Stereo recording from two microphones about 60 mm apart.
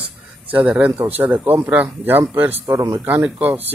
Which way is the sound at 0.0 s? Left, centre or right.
Right.